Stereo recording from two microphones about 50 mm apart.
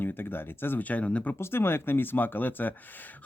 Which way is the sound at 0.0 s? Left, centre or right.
Left.